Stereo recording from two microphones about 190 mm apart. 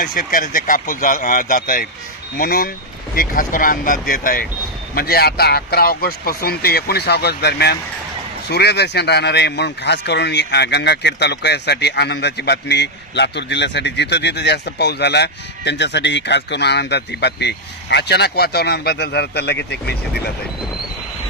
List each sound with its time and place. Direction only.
0.0 s speech: 50° left (ahead or behind)